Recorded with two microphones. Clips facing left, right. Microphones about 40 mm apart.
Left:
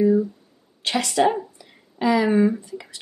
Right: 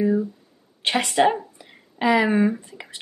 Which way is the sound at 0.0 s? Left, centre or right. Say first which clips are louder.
Left 3 dB; centre.